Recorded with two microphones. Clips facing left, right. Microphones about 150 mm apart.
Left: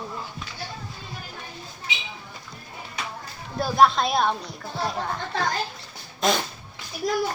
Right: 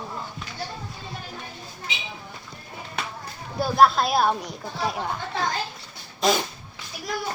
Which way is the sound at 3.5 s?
Centre (ahead or behind).